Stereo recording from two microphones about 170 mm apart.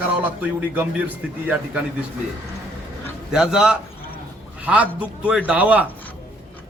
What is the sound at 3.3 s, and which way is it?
A man's voice, 5° right (ahead or behind).